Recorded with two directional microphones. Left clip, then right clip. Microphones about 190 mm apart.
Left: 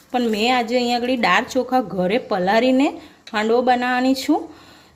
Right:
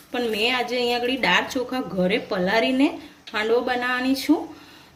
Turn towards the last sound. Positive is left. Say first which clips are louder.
# left 4 dB
turn(degrees=55)  # may be behind; listen again after turning